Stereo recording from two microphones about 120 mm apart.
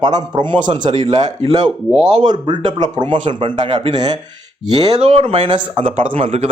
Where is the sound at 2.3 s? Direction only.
35° right (ahead or behind).